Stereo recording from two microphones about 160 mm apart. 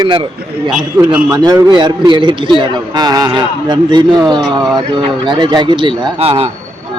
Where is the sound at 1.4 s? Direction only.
30° right (ahead or behind).